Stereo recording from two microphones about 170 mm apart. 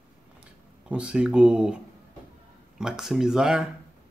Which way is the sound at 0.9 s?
5° right (ahead or behind).